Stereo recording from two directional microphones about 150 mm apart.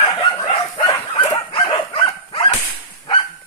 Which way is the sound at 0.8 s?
35° left (ahead or behind).